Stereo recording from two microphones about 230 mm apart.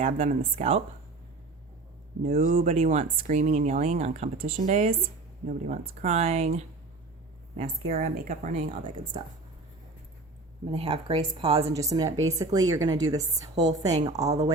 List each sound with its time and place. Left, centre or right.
0.0 s speech: right
2.2 s a woman's voice: right
7.9 s a woman's voice: right
9.2 s speech: centre
10.7 s a woman's voice: right